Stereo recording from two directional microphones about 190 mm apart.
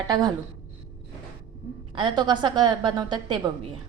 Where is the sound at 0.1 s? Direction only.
20° right (ahead or behind).